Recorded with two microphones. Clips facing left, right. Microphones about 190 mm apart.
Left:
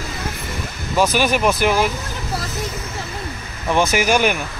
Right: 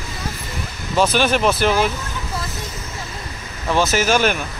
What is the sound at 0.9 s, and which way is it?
Speech, 10° left (ahead or behind).